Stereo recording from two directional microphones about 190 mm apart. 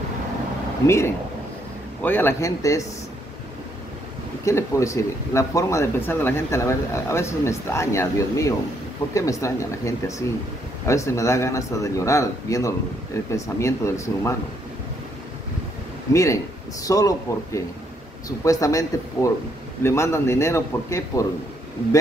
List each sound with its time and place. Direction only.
0.8 s speech: 15° left (ahead or behind)
4.5 s speech: 15° left (ahead or behind)
16.1 s speech: 15° left (ahead or behind)